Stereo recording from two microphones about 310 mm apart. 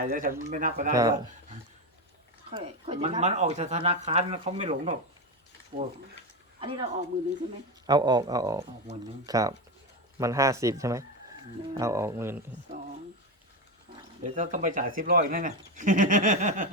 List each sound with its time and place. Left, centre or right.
0.0 s speech: right
2.5 s speech: centre
7.9 s speech: centre
14.3 s speech: right